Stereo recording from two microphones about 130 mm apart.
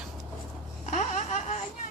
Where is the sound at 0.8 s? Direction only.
65° left (ahead or behind).